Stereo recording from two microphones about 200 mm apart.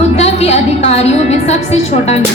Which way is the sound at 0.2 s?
30° left (ahead or behind).